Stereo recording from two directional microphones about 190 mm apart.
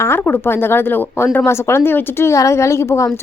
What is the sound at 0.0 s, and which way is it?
Speech, 10° left (ahead or behind).